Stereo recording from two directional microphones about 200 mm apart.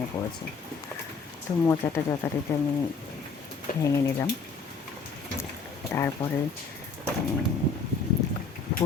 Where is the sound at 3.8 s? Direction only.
15° left (ahead or behind).